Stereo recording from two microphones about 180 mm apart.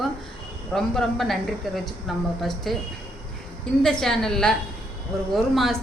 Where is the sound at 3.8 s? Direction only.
5° left (ahead or behind).